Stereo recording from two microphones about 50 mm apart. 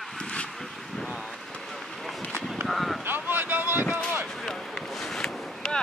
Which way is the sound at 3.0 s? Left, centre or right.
Right.